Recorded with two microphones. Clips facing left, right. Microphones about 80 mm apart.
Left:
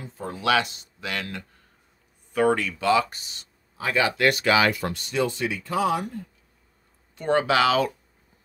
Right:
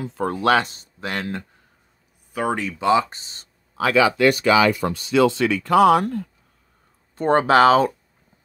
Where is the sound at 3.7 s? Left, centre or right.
Right.